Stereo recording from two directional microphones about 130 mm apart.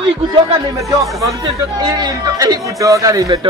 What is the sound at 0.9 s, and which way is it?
Speech, 25° right (ahead or behind).